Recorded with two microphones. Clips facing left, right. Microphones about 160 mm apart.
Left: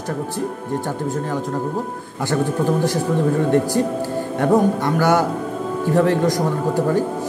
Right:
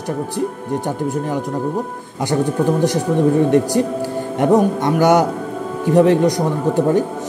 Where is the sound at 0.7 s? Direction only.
15° right (ahead or behind).